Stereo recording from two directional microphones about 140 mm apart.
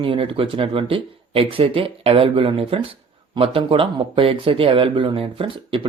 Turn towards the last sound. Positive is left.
turn(degrees=-40)  # may be behind; listen again after turning